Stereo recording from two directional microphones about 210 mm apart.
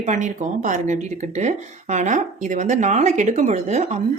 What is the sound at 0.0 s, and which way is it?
Speech, 35° right (ahead or behind).